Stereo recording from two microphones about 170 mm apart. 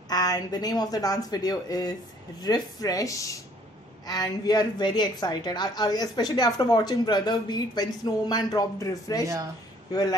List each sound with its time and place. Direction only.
0.1 s a woman's voice: 25° left (ahead or behind)